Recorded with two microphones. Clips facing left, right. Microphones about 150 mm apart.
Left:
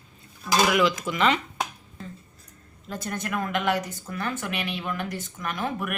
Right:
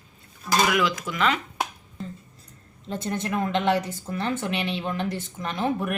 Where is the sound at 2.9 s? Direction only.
25° right (ahead or behind).